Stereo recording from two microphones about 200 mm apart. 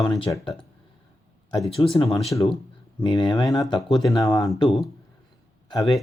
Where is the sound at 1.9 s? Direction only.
25° left (ahead or behind).